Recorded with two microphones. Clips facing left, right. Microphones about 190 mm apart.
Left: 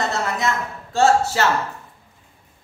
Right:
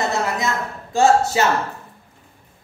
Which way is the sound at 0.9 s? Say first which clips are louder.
Right 1 dB; 15° right (ahead or behind).